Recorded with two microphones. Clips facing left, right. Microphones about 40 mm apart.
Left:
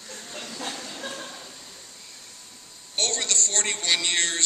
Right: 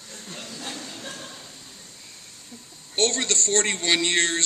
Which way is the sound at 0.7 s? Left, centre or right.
Left.